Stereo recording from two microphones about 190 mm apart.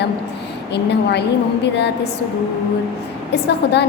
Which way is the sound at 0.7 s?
65° left (ahead or behind).